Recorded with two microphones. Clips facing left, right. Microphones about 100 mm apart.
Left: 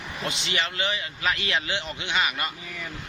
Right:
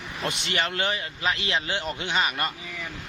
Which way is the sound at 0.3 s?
50° right (ahead or behind).